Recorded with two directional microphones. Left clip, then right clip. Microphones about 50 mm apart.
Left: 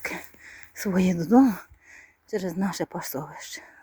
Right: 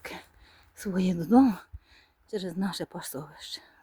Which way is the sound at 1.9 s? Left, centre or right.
Left.